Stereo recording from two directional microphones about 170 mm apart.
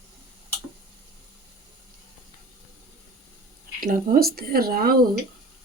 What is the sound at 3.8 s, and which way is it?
Speech, 55° right (ahead or behind).